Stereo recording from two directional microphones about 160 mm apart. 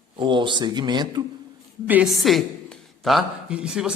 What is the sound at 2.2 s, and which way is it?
A man's voice, centre (ahead or behind).